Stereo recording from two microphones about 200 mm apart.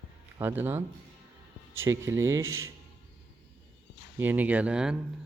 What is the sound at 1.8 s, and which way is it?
Speech, 15° right (ahead or behind).